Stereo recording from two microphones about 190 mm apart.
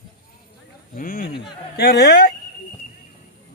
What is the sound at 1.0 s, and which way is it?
Speech, 50° left (ahead or behind).